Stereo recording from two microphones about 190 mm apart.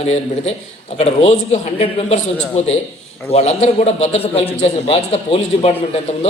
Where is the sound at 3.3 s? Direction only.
35° left (ahead or behind).